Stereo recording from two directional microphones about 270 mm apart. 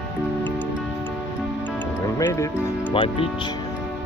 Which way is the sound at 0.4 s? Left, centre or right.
Centre.